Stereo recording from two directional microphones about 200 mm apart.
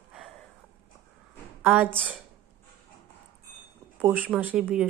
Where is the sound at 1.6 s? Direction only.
10° right (ahead or behind).